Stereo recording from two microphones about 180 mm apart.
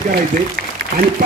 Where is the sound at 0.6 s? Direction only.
55° right (ahead or behind).